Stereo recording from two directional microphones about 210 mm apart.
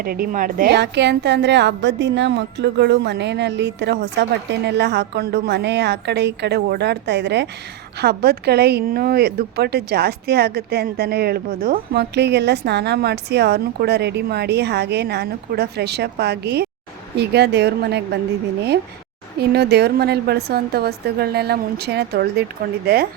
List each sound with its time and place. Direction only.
0.0 s a woman's voice: 45° right (ahead or behind)
19.4 s a woman's voice: 50° right (ahead or behind)